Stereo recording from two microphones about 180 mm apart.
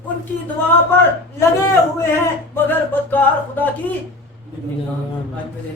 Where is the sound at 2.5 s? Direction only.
10° left (ahead or behind).